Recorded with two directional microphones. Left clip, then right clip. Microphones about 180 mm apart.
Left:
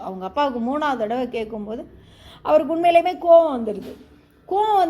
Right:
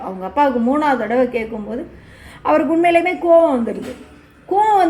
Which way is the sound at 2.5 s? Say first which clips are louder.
Right 3 dB; 40° left (ahead or behind).